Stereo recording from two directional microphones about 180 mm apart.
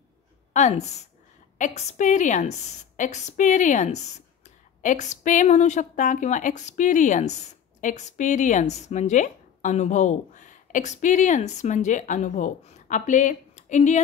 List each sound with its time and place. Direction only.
0.5 s a woman's voice: 40° left (ahead or behind)